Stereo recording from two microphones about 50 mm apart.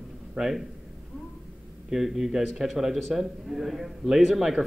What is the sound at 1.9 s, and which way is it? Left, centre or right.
A man's voice, centre.